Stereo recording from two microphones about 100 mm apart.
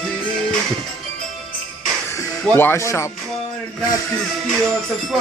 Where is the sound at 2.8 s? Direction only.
30° left (ahead or behind).